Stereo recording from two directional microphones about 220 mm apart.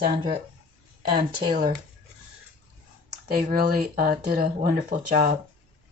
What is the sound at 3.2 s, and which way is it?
Speech, 45° right (ahead or behind).